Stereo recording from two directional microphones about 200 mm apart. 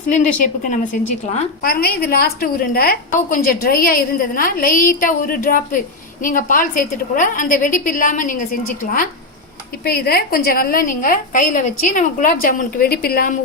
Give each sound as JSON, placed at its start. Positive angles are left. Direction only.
{"t": 0.3, "sound": "a woman's voice", "side_deg": 40}
{"t": 1.6, "sound": "a woman's voice", "side_deg": 50}